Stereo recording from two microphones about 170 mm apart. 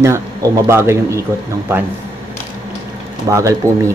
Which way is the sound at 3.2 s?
20° right (ahead or behind).